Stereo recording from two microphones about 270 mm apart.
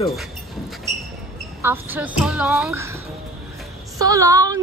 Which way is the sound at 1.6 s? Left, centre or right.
Centre.